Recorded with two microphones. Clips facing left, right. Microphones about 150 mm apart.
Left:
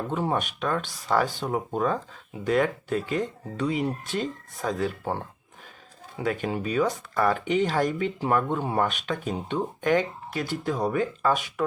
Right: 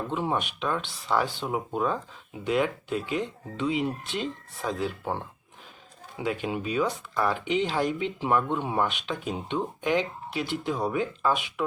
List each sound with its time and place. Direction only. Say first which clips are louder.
0.1 s speech: left 2 dB; 45° left (ahead or behind)
6.1 s speech: left 2 dB; 45° left (ahead or behind)